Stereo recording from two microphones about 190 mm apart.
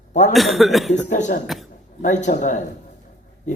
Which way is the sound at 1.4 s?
Centre (ahead or behind).